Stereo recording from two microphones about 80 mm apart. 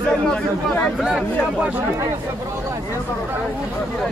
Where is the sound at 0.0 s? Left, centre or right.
Centre.